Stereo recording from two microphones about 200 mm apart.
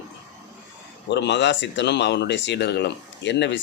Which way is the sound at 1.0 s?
60° left (ahead or behind).